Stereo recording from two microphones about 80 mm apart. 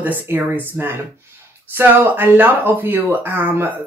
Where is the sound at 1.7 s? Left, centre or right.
Right.